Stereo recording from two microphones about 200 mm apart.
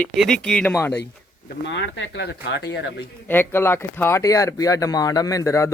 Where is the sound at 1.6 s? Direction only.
60° left (ahead or behind).